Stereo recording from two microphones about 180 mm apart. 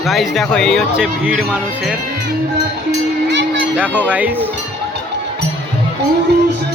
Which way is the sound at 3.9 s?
5° right (ahead or behind).